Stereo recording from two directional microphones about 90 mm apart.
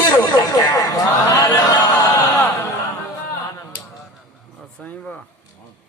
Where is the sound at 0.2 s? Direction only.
40° left (ahead or behind).